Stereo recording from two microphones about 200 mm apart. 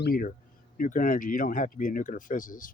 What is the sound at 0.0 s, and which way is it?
Speech, 45° left (ahead or behind).